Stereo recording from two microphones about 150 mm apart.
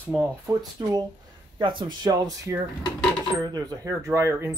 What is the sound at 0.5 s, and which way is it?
Speech, 25° right (ahead or behind).